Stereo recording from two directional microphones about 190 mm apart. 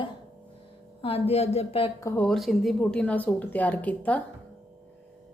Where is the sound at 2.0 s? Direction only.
15° left (ahead or behind).